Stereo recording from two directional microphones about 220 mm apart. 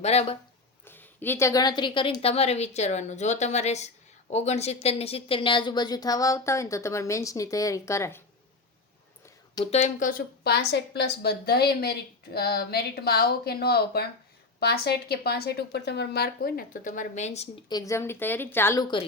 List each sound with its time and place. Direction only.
0.0 s a woman's voice: 30° left (ahead or behind)
0.9 s a woman's voice: 10° left (ahead or behind)
9.6 s a woman's voice: 30° left (ahead or behind)